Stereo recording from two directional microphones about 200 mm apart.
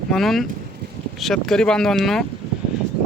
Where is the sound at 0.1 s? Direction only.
Centre (ahead or behind).